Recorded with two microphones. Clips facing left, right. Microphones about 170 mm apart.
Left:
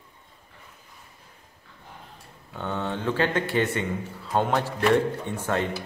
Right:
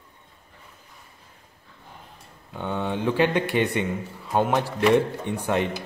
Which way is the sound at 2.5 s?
15° right (ahead or behind).